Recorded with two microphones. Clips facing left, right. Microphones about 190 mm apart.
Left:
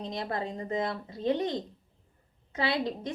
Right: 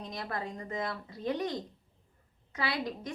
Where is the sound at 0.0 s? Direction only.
25° left (ahead or behind).